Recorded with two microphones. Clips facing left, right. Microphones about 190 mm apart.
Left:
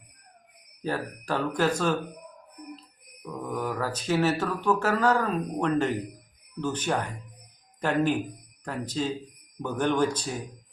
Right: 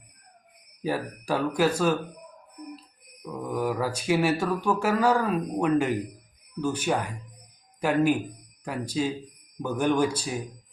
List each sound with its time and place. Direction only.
0.8 s mantra: 10° right (ahead or behind)
3.2 s mantra: 10° right (ahead or behind)
7.8 s a man's voice: 10° right (ahead or behind)
8.6 s mantra: 10° right (ahead or behind)